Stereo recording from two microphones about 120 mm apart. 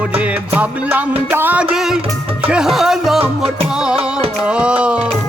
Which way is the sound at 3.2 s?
55° right (ahead or behind).